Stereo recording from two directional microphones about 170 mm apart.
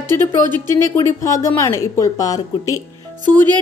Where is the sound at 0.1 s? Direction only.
15° left (ahead or behind).